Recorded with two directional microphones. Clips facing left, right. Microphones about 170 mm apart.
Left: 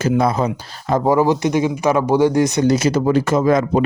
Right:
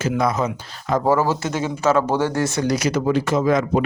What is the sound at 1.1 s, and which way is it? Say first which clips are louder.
Speech: left 5 dB; 15° left (ahead or behind).